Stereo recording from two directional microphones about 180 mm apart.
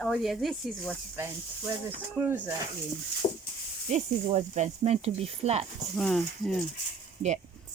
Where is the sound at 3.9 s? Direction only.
40° right (ahead or behind).